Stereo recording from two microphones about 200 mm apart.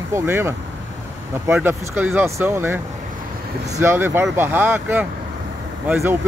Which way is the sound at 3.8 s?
10° right (ahead or behind).